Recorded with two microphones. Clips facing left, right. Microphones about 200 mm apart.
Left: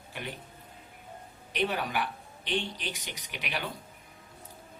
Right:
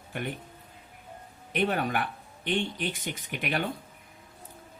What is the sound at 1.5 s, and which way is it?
Speech, 50° right (ahead or behind).